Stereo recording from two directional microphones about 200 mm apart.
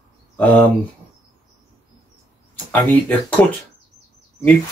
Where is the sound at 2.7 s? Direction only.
10° left (ahead or behind).